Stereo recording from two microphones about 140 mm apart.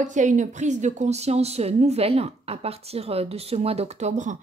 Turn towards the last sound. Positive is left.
turn(degrees=-60)  # may be behind; listen again after turning